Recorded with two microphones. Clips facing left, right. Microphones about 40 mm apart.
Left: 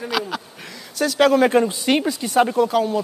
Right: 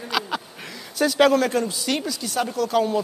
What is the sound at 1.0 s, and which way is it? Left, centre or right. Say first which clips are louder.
Speech: left 1 dB; centre.